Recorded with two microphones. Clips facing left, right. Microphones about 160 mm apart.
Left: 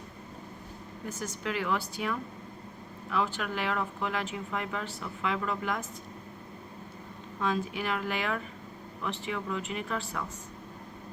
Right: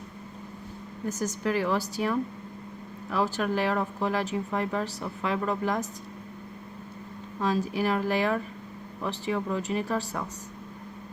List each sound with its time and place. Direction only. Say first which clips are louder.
1.2 s speech: right 6 dB; 40° right (ahead or behind)
7.3 s speech: right 4 dB; 35° right (ahead or behind)